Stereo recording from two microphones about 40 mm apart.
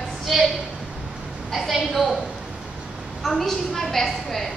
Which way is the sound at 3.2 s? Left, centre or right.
Centre.